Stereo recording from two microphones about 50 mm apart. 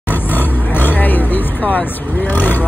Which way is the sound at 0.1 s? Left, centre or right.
Left.